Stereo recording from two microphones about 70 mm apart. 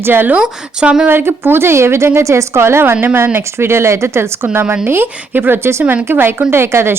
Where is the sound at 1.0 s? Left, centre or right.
Right.